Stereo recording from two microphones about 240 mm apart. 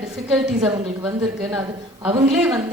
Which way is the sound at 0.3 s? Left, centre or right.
Centre.